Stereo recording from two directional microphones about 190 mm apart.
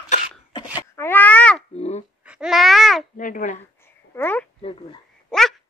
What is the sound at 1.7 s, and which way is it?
Babbling, 35° left (ahead or behind).